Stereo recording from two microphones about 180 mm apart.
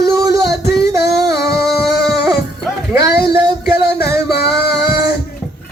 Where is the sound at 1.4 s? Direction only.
Centre (ahead or behind).